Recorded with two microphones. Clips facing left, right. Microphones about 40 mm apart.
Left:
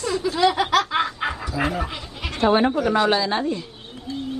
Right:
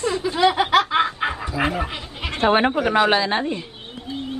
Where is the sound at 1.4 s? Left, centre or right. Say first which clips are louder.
Right 2 dB; right.